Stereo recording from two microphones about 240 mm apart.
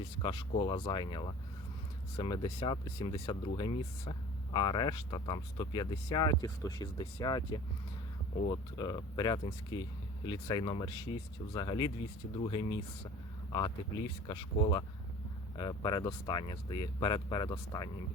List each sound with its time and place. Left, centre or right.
0.2 s speech: centre